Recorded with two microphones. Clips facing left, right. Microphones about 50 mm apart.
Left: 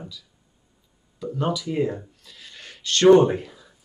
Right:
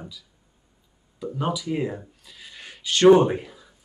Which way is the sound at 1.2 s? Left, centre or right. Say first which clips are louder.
Left 1 dB; centre.